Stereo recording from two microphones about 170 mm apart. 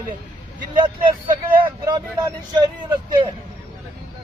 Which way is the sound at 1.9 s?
25° right (ahead or behind).